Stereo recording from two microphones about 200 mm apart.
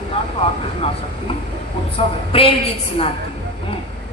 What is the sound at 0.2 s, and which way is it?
Vehicle, 25° left (ahead or behind).